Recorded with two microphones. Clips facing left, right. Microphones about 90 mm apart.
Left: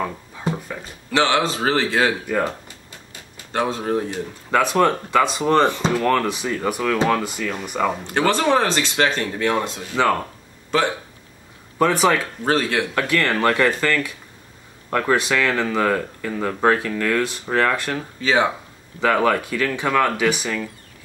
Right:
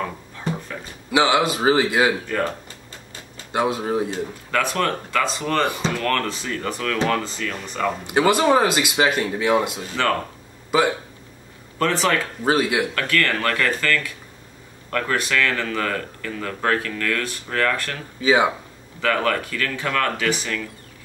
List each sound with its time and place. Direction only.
1.1 s speech: 10° right (ahead or behind)
2.2 s speech: 10° left (ahead or behind)
3.5 s speech: 10° right (ahead or behind)
4.1 s speech: 20° left (ahead or behind)
8.1 s speech: 10° right (ahead or behind)
10.0 s speech: 15° left (ahead or behind)
10.7 s speech: 10° right (ahead or behind)
11.8 s speech: 15° left (ahead or behind)
12.4 s speech: 10° right (ahead or behind)
12.9 s speech: 20° left (ahead or behind)
18.2 s speech: 10° right (ahead or behind)
18.9 s speech: 20° left (ahead or behind)